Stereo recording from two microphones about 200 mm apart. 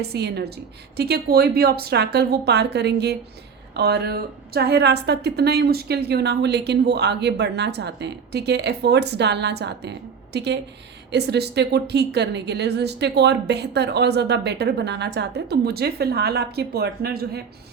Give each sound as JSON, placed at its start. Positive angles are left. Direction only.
{"t": 0.0, "sound": "a woman's voice", "side_deg": -55}